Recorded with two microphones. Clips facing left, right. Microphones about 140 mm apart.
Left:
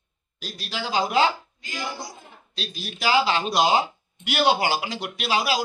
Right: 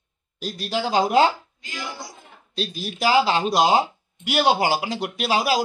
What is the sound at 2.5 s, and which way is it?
Speech, 45° right (ahead or behind).